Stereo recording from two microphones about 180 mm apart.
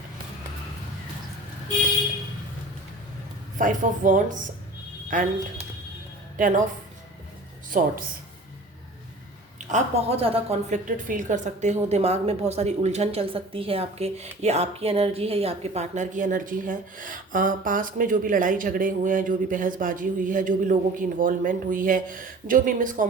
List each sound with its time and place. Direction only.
3.6 s a woman's voice: 45° right (ahead or behind)
6.3 s a woman's voice: 50° right (ahead or behind)
7.7 s a woman's voice: 45° right (ahead or behind)
9.6 s a woman's voice: 40° right (ahead or behind)